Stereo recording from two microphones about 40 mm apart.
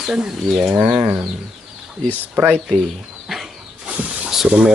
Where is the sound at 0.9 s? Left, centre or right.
Right.